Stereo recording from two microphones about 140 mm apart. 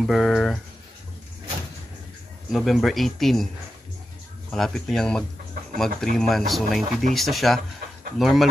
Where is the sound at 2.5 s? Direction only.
Centre (ahead or behind).